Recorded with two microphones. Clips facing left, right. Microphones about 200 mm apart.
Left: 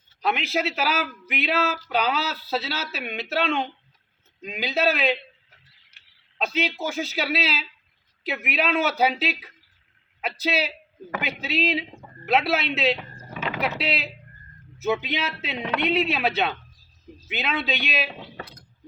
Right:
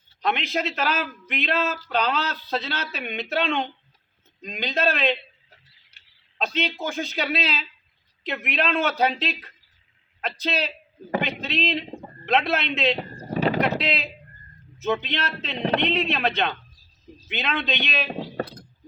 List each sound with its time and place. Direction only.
0.2 s a man's voice: 5° left (ahead or behind)
6.4 s a man's voice: 5° left (ahead or behind)
13.0 s a sound: 35° right (ahead or behind)
13.7 s a man's voice: 5° left (ahead or behind)
15.5 s speech: 35° right (ahead or behind)
15.8 s a man's voice: 10° left (ahead or behind)
18.1 s a sound: 40° right (ahead or behind)